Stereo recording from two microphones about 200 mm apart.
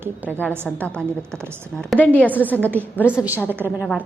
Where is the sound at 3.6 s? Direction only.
5° right (ahead or behind).